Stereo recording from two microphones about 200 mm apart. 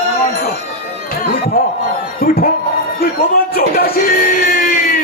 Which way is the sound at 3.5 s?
50° left (ahead or behind).